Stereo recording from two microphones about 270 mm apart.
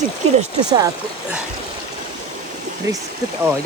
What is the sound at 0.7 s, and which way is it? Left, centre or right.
Speech, centre.